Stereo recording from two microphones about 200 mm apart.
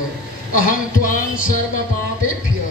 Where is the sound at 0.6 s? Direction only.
45° left (ahead or behind).